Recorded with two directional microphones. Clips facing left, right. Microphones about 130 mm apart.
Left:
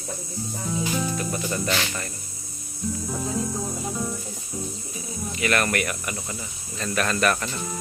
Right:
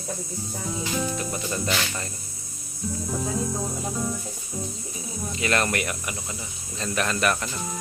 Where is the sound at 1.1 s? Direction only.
20° right (ahead or behind).